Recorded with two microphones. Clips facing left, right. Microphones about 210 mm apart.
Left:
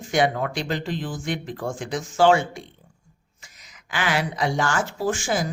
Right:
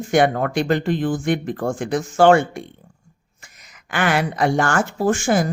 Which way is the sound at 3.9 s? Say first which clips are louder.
Right 5 dB; 55° right (ahead or behind).